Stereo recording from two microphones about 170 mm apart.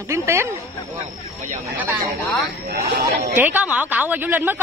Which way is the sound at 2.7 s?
60° right (ahead or behind).